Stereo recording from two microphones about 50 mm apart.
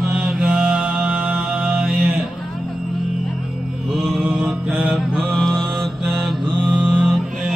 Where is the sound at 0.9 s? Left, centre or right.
Right.